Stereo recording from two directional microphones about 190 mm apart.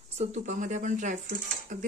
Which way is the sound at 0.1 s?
35° right (ahead or behind).